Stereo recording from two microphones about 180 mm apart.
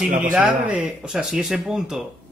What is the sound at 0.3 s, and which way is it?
Speech, 10° right (ahead or behind).